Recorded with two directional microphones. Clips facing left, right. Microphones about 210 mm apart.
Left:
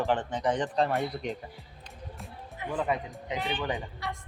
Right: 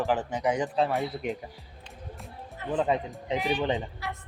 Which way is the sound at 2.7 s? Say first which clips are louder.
Right 4 dB; 25° right (ahead or behind).